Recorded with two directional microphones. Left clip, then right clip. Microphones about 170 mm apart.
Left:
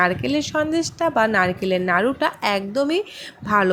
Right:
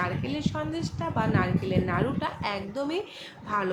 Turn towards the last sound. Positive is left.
turn(degrees=45)  # may be behind; listen again after turning